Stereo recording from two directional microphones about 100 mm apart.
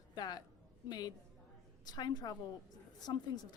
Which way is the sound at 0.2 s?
40° left (ahead or behind).